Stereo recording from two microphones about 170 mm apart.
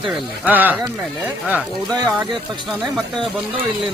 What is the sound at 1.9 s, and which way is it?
Speech, 25° right (ahead or behind).